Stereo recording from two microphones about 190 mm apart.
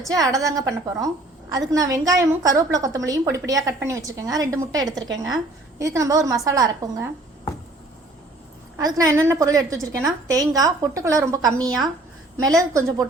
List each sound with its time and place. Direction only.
0.1 s a woman's voice: 20° right (ahead or behind)
8.8 s a woman's voice: 20° right (ahead or behind)